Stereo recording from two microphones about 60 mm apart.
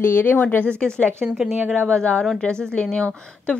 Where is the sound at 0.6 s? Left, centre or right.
Centre.